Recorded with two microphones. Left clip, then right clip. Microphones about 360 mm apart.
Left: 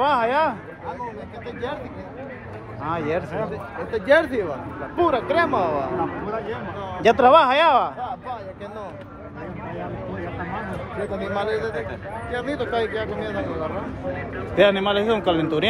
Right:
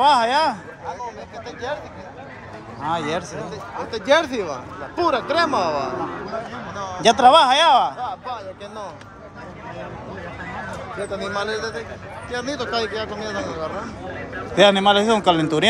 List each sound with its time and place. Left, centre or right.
0.0 s speech: centre
2.9 s a man's voice: centre
3.9 s speech: right
7.0 s a man's voice: centre
8.0 s a sound: right
11.1 s speech: right
14.5 s a man's voice: centre